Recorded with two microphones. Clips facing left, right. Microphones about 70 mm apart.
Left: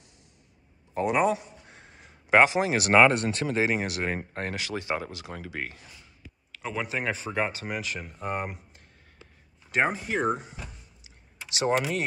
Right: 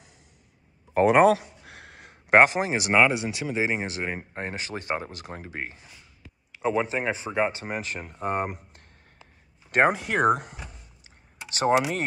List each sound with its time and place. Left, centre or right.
0.9 s a sound: right
2.4 s speech: right
2.9 s speech: centre
4.6 s speech: right; by 7.6 s centre
7.6 s speech: right
9.7 s speech: right
11.1 s a sound: right